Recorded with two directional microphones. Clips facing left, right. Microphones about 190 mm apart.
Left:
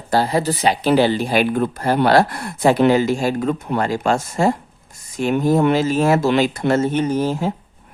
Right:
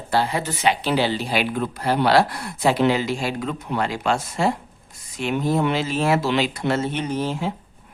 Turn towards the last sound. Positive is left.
turn(degrees=45)  # may be behind; listen again after turning